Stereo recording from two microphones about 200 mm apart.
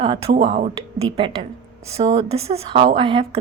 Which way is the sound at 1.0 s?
5° left (ahead or behind).